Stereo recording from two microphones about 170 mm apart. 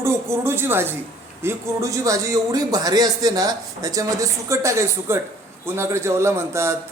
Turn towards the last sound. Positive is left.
turn(degrees=-15)  # may be behind; listen again after turning